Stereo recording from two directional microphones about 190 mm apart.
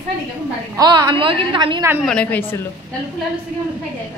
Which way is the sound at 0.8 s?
20° right (ahead or behind).